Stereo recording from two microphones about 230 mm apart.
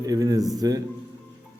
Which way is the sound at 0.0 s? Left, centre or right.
Centre.